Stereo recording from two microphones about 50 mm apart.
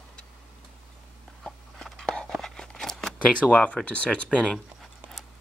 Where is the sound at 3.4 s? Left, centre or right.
Left.